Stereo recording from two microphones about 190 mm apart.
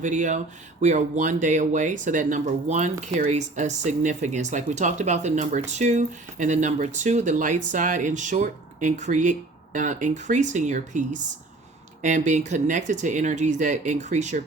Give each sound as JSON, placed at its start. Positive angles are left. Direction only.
{"t": 0.0, "sound": "speech", "side_deg": -40}